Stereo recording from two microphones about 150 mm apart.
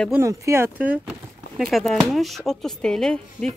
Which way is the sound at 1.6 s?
Centre (ahead or behind).